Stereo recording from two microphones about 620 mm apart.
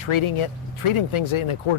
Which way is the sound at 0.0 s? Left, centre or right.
Left.